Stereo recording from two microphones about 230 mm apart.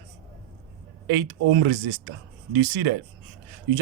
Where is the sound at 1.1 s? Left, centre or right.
Right.